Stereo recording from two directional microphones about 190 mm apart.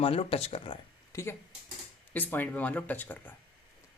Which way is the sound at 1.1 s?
15° left (ahead or behind).